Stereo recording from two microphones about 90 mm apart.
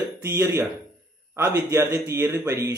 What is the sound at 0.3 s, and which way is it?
A man's voice, 35° right (ahead or behind).